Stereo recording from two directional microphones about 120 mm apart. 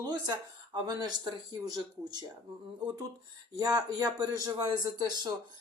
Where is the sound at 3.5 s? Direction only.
30° right (ahead or behind).